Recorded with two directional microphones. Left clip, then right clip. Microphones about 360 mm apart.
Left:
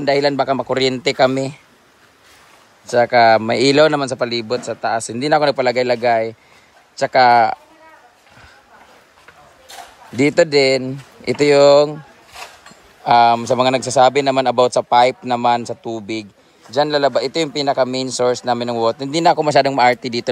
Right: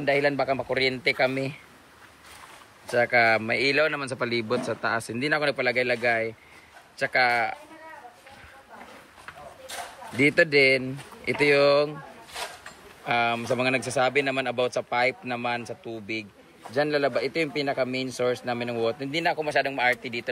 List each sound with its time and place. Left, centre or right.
0.3 s a man's voice: left
0.7 s speech: centre
2.9 s speech: centre
10.1 s speech: centre
13.0 s speech: centre